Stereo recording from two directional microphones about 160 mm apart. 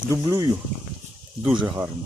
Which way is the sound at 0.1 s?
20° right (ahead or behind).